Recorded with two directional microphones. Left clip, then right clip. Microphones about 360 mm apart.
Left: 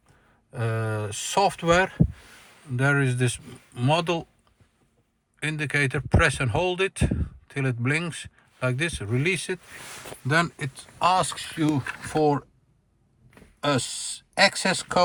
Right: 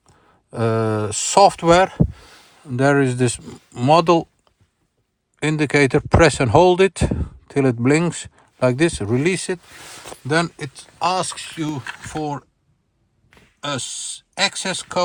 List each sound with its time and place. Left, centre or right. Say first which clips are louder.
0.5 s speech: right 10 dB; right
5.4 s speech: right 8 dB; centre
13.6 s speech: left 1 dB; centre